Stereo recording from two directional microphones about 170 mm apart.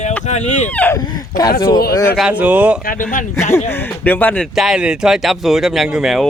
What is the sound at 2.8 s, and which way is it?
Speech, 55° left (ahead or behind).